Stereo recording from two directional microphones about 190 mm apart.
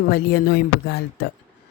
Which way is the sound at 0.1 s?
55° left (ahead or behind).